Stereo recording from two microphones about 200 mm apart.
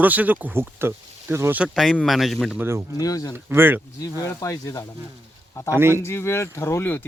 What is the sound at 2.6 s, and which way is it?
Speech, 15° right (ahead or behind).